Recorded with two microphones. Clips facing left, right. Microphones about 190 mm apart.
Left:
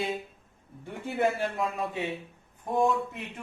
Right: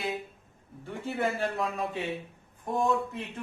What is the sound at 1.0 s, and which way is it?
Speech, 15° left (ahead or behind).